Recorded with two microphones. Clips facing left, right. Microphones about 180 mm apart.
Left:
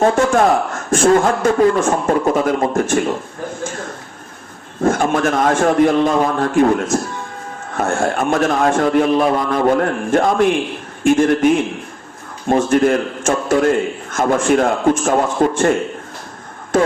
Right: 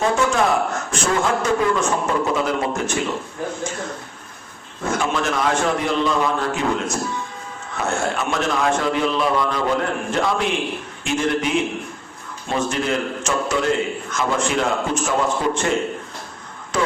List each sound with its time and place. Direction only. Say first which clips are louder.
0.0 s a man's voice: left 5 dB; 50° left (ahead or behind)
4.8 s a man's voice: left 7 dB; 50° left (ahead or behind)